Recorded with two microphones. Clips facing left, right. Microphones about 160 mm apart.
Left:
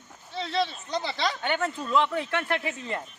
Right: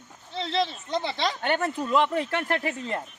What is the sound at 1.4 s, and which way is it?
Speech, 40° right (ahead or behind).